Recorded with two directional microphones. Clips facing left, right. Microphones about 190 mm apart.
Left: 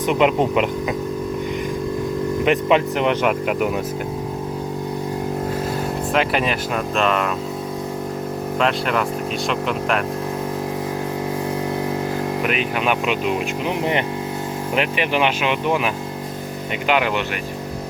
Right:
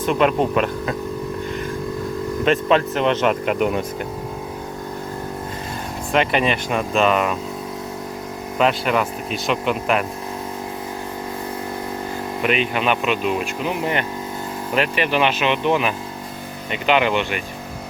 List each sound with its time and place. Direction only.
0.0 s speech: 15° left (ahead or behind)
2.4 s speech: 15° left (ahead or behind)
6.1 s speech: centre (ahead or behind)
8.5 s speech: centre (ahead or behind)
12.4 s speech: 5° left (ahead or behind)